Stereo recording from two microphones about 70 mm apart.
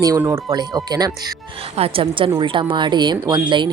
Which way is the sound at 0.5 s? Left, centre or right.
Right.